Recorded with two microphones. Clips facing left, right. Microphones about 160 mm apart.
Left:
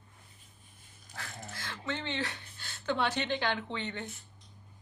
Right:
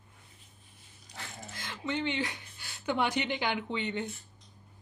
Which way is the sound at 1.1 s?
15° right (ahead or behind).